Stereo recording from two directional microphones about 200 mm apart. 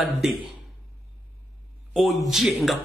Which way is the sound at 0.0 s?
Centre (ahead or behind).